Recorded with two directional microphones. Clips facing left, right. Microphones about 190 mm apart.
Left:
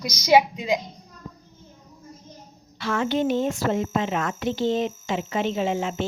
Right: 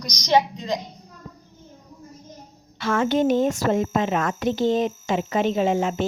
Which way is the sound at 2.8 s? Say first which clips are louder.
Right 3 dB; 50° right (ahead or behind).